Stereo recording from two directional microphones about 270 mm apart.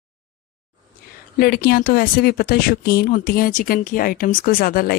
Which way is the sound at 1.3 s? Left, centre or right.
Left.